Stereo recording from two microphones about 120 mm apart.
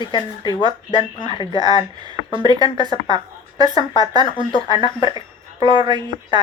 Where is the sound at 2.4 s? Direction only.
35° right (ahead or behind).